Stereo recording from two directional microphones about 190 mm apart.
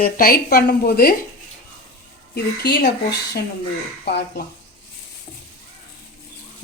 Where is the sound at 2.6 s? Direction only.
55° left (ahead or behind).